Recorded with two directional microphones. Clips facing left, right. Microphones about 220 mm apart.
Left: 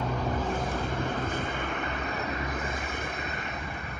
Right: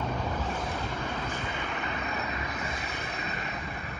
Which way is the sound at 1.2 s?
50° left (ahead or behind).